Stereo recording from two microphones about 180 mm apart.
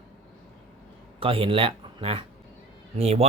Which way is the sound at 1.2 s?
30° right (ahead or behind).